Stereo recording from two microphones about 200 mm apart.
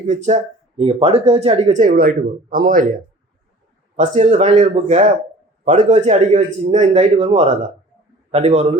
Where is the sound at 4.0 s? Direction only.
35° right (ahead or behind).